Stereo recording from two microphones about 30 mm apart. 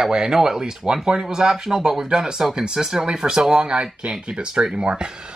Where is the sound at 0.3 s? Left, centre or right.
Centre.